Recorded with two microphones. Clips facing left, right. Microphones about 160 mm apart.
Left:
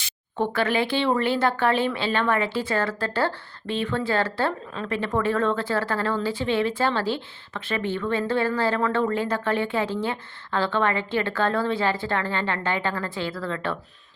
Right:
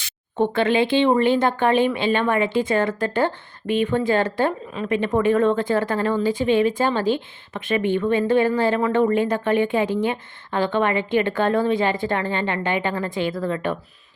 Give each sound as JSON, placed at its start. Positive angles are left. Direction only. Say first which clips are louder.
{"t": 0.3, "sound": "speech", "louder": "right 5 dB", "side_deg": -20}